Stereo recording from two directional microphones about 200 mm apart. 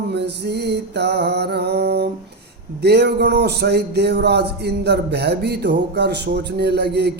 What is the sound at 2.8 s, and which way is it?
Speech, 55° right (ahead or behind).